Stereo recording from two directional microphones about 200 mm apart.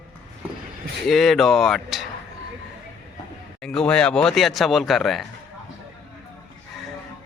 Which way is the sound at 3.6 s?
5° left (ahead or behind).